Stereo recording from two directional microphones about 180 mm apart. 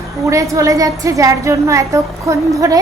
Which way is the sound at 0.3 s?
15° right (ahead or behind).